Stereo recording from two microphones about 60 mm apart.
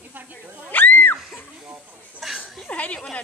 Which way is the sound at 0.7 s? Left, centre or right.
Left.